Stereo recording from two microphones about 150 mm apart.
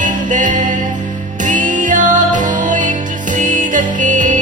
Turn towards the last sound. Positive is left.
turn(degrees=-55)  # may be behind; listen again after turning